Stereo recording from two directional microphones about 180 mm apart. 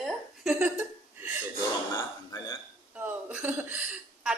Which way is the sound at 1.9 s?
20° left (ahead or behind).